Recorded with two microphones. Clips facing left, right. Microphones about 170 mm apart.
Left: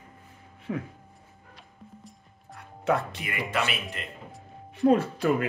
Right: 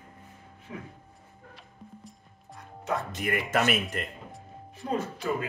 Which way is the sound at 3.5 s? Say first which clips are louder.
Right 3 dB; 45° right (ahead or behind).